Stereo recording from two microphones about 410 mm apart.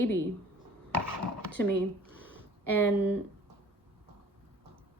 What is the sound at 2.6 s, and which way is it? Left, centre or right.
Speech, centre.